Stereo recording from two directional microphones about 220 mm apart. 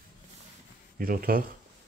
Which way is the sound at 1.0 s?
40° right (ahead or behind).